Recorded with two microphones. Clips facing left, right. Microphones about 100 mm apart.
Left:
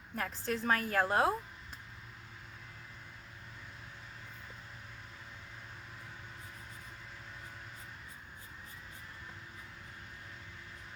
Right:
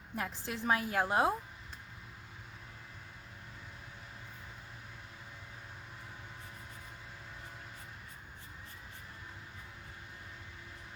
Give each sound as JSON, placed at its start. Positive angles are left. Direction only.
{"t": 0.2, "sound": "a woman's voice", "side_deg": -15}